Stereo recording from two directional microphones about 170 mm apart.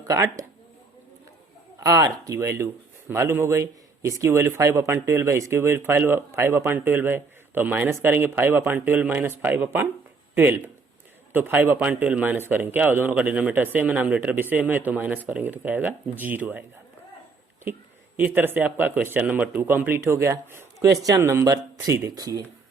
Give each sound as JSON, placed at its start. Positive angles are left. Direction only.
{"t": 0.1, "sound": "speech", "side_deg": -20}
{"t": 1.8, "sound": "speech", "side_deg": -20}
{"t": 18.2, "sound": "speech", "side_deg": -10}